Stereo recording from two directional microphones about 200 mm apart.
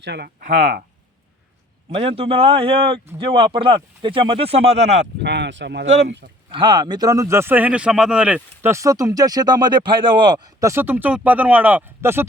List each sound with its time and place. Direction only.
0.0 s speech: 55° right (ahead or behind)
0.4 s speech: 35° right (ahead or behind)
1.9 s speech: 30° right (ahead or behind)
5.2 s speech: 60° right (ahead or behind)
5.8 s speech: 35° right (ahead or behind)
6.5 s speech: 25° right (ahead or behind)